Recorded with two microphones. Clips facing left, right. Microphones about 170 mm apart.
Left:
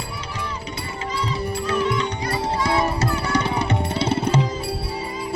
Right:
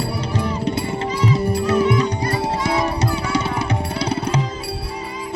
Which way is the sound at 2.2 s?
20° right (ahead or behind).